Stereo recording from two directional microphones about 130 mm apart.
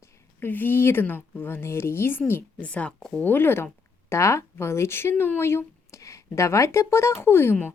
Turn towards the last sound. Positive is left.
turn(degrees=15)  # may be behind; listen again after turning